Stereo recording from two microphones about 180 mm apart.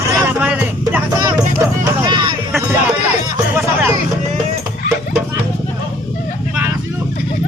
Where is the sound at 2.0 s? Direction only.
25° right (ahead or behind).